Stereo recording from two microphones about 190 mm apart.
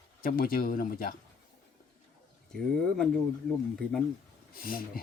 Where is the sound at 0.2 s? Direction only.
50° left (ahead or behind).